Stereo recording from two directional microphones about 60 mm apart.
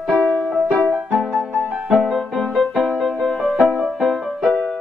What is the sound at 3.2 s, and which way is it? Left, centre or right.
Music, centre.